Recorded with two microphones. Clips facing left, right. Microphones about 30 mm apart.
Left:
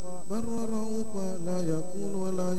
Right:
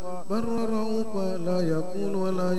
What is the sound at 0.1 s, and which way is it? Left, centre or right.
Mantra, right.